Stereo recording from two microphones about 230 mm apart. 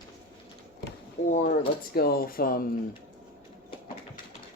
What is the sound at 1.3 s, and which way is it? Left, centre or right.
Speech, left.